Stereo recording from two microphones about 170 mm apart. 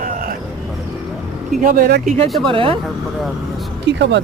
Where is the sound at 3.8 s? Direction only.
90° right.